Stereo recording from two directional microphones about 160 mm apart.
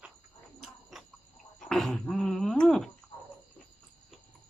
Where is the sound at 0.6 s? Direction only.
Centre (ahead or behind).